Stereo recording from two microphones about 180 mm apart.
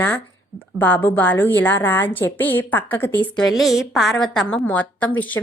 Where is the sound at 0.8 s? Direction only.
10° left (ahead or behind).